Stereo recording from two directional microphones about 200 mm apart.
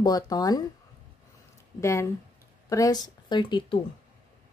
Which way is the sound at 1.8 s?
15° left (ahead or behind).